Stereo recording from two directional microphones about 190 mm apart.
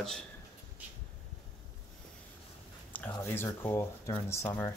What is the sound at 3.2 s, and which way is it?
Speech, 10° left (ahead or behind).